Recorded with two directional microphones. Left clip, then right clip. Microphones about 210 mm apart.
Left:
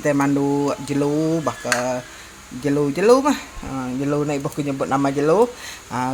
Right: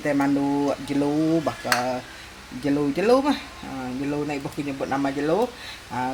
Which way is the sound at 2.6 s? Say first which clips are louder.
Left 5 dB; 30° left (ahead or behind).